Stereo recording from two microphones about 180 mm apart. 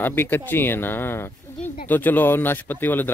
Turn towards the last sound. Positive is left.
turn(degrees=10)  # may be behind; listen again after turning